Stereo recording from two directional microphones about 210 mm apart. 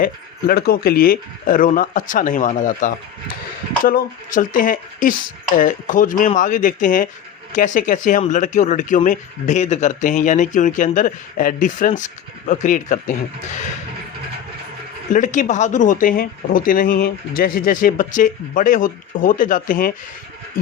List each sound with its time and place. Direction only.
0.0 s speech: 45° left (ahead or behind)
15.1 s speech: 35° left (ahead or behind)